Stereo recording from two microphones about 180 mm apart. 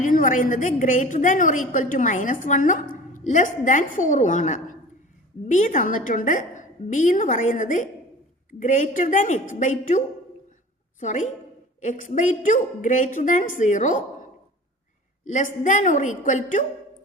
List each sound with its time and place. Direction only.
0.0 s a woman's voice: 45° left (ahead or behind)
11.0 s a woman's voice: 40° left (ahead or behind)
15.2 s a woman's voice: 45° left (ahead or behind)